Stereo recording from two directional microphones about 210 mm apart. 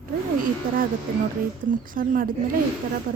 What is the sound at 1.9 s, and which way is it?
Speech, 40° right (ahead or behind).